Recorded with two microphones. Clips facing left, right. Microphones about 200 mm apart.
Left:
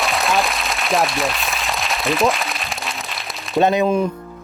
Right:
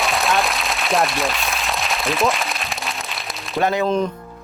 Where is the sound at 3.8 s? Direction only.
10° left (ahead or behind).